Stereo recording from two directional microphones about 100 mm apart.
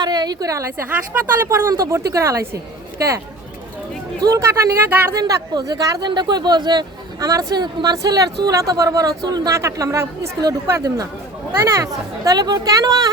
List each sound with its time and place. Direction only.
0.0 s speech: 45° right (ahead or behind)
0.9 s a woman's voice: 20° right (ahead or behind)
4.2 s speech: 35° right (ahead or behind)
4.8 s a woman's voice: 20° right (ahead or behind)
5.1 s speech: 35° right (ahead or behind)